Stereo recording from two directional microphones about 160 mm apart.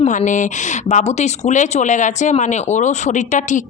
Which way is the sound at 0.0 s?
50° left (ahead or behind).